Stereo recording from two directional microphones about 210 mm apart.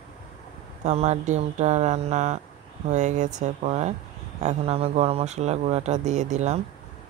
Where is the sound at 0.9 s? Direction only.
30° right (ahead or behind).